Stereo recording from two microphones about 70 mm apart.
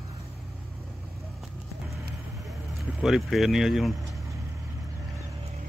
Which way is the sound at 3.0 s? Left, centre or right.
Centre.